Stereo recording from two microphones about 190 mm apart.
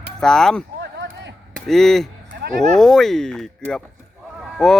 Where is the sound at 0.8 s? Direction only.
70° right (ahead or behind).